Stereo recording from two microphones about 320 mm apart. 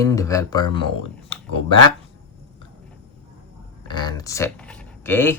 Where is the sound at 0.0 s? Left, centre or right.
Centre.